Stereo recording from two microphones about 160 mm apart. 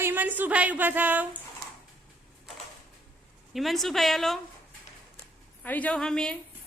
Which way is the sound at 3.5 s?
Centre (ahead or behind).